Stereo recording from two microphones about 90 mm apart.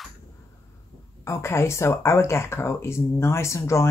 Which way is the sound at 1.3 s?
30° left (ahead or behind).